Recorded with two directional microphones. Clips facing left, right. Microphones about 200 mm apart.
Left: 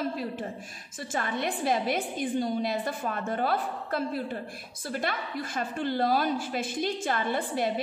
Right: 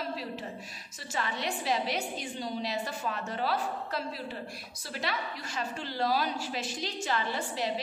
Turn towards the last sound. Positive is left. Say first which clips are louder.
# left 4 dB
turn(degrees=55)  # may be behind; listen again after turning